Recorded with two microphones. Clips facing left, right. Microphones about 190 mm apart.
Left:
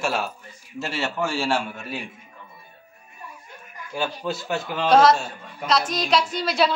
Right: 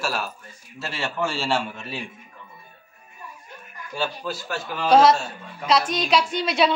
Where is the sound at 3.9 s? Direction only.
15° left (ahead or behind).